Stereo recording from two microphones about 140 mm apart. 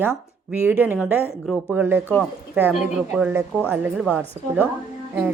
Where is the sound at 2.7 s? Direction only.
5° right (ahead or behind).